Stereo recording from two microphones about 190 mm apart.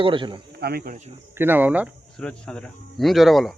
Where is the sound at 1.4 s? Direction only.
10° right (ahead or behind).